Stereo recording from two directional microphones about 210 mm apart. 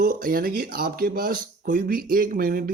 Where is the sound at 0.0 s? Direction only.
40° right (ahead or behind).